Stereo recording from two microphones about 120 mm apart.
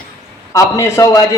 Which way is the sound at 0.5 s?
25° left (ahead or behind).